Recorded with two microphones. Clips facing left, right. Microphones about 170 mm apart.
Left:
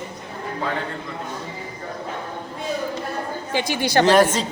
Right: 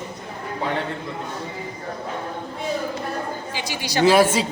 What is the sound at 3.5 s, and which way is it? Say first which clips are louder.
Speech: left 6 dB; 55° left (ahead or behind).